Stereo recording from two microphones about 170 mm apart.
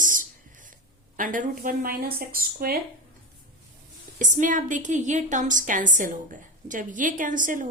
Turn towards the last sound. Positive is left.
turn(degrees=-50)  # may be behind; listen again after turning